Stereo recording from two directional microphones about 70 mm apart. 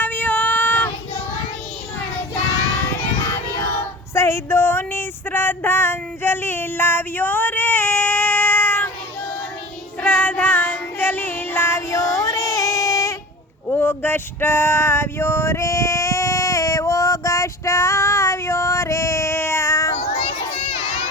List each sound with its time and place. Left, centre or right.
0.0 s child singing: left
4.1 s a sound: left
10.0 s child singing: left
13.7 s male singing: left